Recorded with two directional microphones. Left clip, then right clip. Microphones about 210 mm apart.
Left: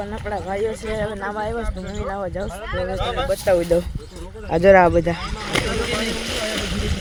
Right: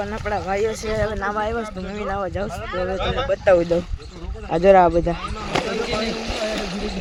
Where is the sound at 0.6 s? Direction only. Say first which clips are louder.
Right 1 dB; 20° right (ahead or behind).